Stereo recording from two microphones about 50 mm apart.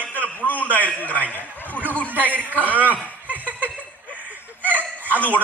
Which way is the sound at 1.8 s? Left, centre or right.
Left.